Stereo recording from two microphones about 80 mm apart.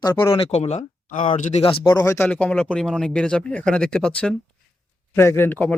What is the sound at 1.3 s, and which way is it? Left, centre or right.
Speech, left.